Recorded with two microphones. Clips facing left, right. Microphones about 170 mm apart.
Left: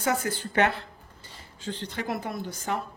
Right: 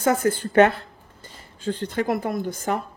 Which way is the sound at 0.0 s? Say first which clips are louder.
Right 7 dB; 50° right (ahead or behind).